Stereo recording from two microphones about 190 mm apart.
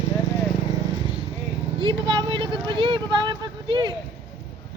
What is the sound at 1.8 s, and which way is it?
Vehicle, 25° right (ahead or behind).